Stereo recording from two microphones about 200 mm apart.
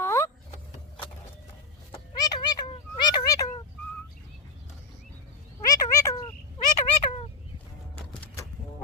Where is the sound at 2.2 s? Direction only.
20° left (ahead or behind).